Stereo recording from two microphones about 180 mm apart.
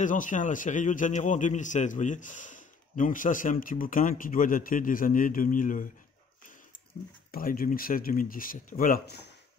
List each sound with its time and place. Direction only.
0.0 s a man's voice: 45° left (ahead or behind)
7.2 s a man's voice: 55° left (ahead or behind)